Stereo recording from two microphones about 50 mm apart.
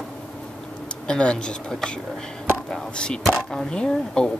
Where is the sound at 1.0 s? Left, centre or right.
Centre.